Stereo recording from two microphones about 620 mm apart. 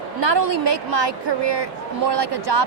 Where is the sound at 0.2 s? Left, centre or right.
Right.